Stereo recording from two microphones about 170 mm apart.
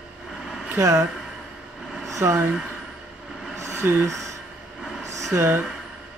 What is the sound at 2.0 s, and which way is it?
Speech, 15° right (ahead or behind).